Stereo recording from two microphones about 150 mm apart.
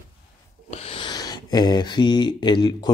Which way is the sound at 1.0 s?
25° left (ahead or behind).